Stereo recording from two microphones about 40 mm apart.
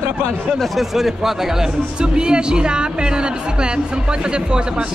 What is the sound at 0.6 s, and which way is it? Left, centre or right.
Speech, centre.